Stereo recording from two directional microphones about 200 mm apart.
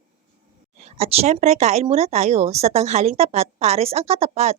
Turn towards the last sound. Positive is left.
turn(degrees=-30)  # may be behind; listen again after turning